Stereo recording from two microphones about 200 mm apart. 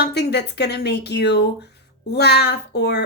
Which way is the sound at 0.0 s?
55° left (ahead or behind).